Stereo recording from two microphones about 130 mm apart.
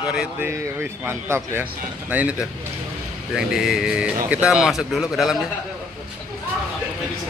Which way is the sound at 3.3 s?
5° right (ahead or behind).